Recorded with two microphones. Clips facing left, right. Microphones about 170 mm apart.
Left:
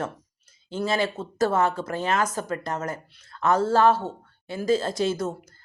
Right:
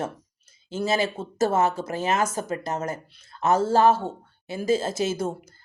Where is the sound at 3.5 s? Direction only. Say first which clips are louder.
Right 1 dB; 10° right (ahead or behind).